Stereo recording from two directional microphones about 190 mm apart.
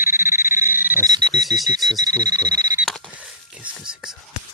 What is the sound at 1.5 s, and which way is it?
Speech, 20° right (ahead or behind).